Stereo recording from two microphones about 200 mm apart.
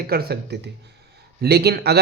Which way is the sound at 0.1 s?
50° right (ahead or behind).